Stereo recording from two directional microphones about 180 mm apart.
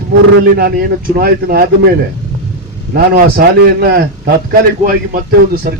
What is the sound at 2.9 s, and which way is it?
A man's voice, 60° right (ahead or behind).